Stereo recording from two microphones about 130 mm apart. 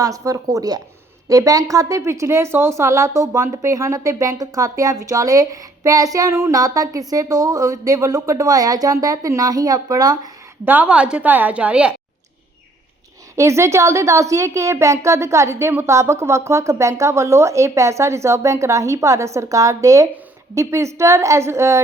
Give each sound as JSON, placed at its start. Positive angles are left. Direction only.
{"t": 0.0, "sound": "a woman's voice", "side_deg": -25}
{"t": 10.7, "sound": "a woman's voice", "side_deg": -10}
{"t": 13.3, "sound": "a woman's voice", "side_deg": -20}